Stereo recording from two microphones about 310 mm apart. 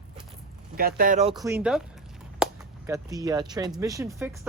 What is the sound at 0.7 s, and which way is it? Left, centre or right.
Speech, right.